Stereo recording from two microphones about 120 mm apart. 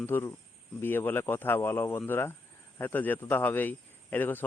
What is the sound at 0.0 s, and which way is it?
Speech, 20° left (ahead or behind).